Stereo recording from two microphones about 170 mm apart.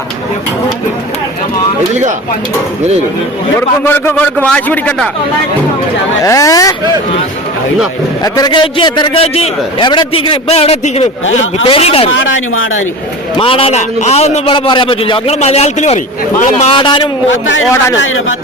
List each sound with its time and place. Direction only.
3.8 s a man's voice: 10° left (ahead or behind)
6.2 s speech: 20° left (ahead or behind)
8.2 s a man's voice: 25° left (ahead or behind)
12.1 s speech: 90° left
13.3 s a man's voice: 30° left (ahead or behind)
16.7 s speech: 30° left (ahead or behind)